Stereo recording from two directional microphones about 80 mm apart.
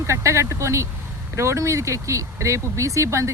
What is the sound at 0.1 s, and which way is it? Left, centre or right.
Speech, right.